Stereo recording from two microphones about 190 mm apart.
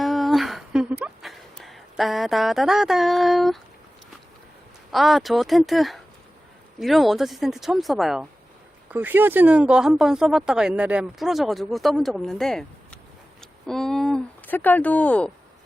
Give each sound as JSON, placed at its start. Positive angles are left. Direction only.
{"t": 0.0, "sound": "music", "side_deg": 0}
{"t": 4.9, "sound": "speech", "side_deg": 0}